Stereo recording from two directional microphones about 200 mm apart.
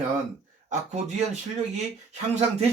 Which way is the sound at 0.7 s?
35° right (ahead or behind).